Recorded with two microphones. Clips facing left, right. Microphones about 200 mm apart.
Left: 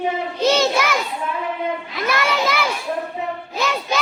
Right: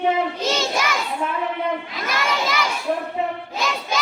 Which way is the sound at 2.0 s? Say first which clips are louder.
Left 4 dB; 65° left (ahead or behind).